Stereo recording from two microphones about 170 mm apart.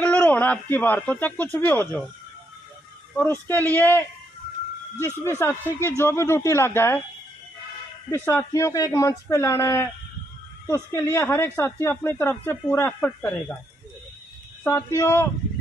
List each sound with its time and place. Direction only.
0.0 s a man's voice: 10° left (ahead or behind)
3.2 s speech: 10° left (ahead or behind)
8.1 s speech: 15° left (ahead or behind)
14.6 s speech: 15° left (ahead or behind)